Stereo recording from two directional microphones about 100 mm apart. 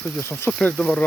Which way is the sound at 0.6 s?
10° left (ahead or behind).